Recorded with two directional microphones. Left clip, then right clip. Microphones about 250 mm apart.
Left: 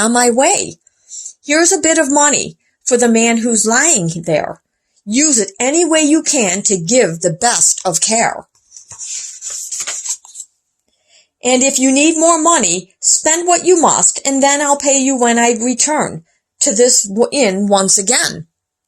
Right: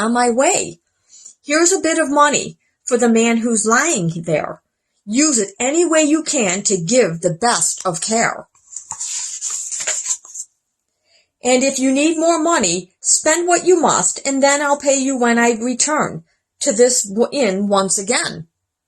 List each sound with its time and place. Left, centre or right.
0.0 s a woman's voice: left
11.4 s a woman's voice: left